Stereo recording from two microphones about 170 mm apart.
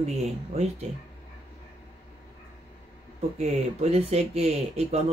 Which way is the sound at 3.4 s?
40° right (ahead or behind).